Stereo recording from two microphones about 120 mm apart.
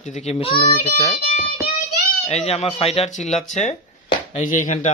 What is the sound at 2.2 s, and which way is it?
A child's voice, 65° left (ahead or behind).